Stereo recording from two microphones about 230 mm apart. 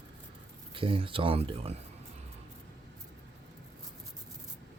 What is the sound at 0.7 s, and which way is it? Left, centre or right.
Speech, right.